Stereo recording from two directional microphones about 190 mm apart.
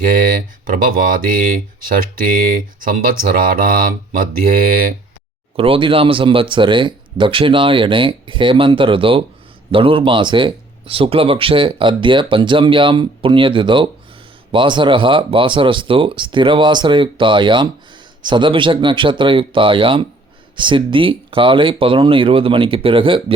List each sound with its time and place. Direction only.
0.1 s speech: 45° right (ahead or behind)
5.5 s speech: 30° right (ahead or behind)